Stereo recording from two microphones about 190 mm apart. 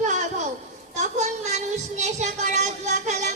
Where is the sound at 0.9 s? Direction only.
35° right (ahead or behind).